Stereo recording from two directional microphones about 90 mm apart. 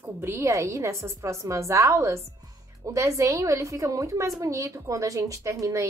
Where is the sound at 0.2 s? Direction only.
30° right (ahead or behind).